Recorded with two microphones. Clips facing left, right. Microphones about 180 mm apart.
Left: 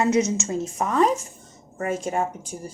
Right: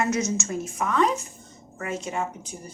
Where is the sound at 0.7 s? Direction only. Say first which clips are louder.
Left 2 dB; 40° left (ahead or behind).